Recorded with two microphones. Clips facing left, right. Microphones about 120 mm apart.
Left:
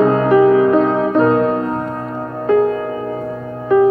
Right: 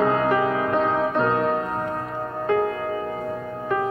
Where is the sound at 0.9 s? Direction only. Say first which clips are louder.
Left 8 dB; 30° left (ahead or behind).